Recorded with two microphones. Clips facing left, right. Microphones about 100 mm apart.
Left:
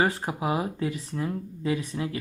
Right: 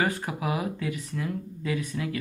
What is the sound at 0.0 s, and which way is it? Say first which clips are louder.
Speech: left 2 dB; 30° left (ahead or behind).